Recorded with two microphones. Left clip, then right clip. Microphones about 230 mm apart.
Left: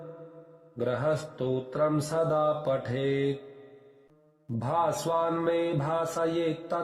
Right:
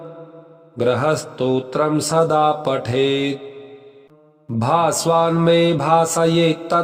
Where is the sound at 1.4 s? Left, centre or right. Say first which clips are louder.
Right 9 dB; right.